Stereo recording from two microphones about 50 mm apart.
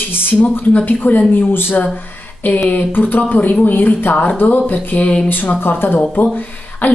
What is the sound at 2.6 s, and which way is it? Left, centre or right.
Speech, left.